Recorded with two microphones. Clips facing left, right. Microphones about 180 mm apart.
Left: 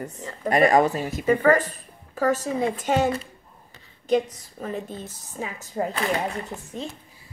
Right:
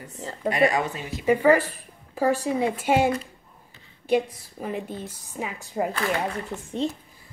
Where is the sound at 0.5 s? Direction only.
45° left (ahead or behind).